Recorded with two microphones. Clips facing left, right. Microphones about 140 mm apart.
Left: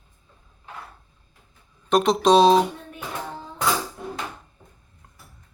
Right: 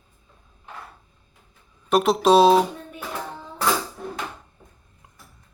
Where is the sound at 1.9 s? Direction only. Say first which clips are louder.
Even; 5° right (ahead or behind).